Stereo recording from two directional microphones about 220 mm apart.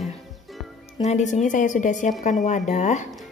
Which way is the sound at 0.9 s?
30° left (ahead or behind).